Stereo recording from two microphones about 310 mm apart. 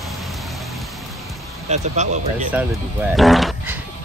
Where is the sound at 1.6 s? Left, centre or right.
Right.